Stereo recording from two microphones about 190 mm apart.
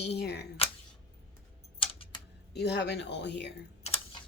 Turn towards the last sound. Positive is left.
turn(degrees=35)  # may be behind; listen again after turning